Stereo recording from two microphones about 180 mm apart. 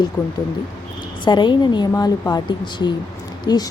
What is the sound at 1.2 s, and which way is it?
Speech, 25° left (ahead or behind).